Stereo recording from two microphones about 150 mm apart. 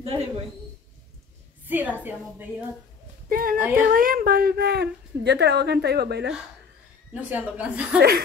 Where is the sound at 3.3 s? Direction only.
70° right (ahead or behind).